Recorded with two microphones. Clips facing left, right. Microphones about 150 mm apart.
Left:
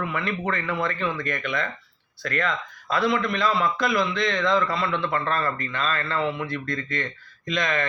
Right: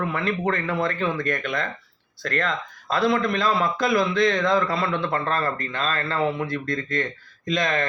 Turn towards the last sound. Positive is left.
turn(degrees=-40)  # may be behind; listen again after turning